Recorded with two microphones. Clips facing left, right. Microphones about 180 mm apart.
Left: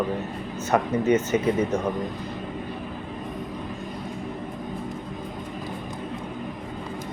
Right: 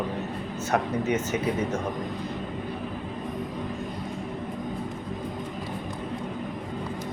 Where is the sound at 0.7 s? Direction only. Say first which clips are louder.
Left 5 dB; centre (ahead or behind).